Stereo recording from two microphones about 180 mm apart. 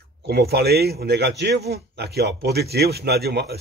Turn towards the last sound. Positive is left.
turn(degrees=-65)  # may be behind; listen again after turning